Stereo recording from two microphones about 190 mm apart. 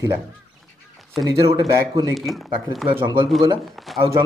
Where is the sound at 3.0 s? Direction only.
25° right (ahead or behind).